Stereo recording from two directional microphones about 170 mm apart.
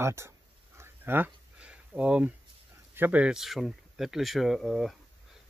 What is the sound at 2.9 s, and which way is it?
Speech, 10° right (ahead or behind).